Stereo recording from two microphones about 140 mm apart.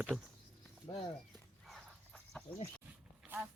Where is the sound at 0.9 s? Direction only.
35° left (ahead or behind).